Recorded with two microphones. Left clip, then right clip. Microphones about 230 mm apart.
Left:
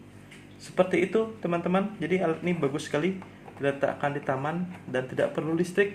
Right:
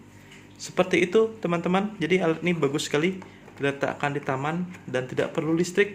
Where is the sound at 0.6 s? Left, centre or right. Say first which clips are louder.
Right 2 dB; right.